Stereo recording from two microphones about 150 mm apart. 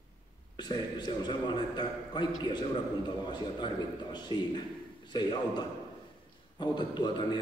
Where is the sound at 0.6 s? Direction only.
30° left (ahead or behind).